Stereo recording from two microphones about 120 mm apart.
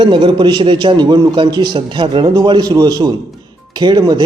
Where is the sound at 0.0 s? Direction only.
40° right (ahead or behind).